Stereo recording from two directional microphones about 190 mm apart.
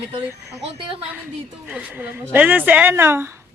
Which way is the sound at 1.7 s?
10° right (ahead or behind).